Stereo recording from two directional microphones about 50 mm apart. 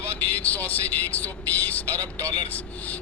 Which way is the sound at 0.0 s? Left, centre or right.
Left.